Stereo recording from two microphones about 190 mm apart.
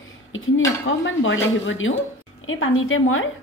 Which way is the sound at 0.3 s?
90° left.